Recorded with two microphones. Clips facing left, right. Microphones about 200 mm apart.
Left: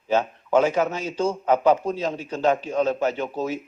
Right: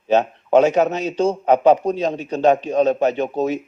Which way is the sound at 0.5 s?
20° right (ahead or behind).